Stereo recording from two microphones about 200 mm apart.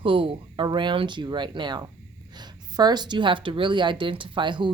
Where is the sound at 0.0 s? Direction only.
25° right (ahead or behind).